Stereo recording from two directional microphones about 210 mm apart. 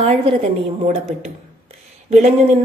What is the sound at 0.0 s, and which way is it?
Speech, 25° right (ahead or behind).